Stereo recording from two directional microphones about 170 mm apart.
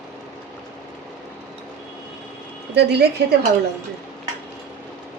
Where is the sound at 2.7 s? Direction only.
75° right (ahead or behind).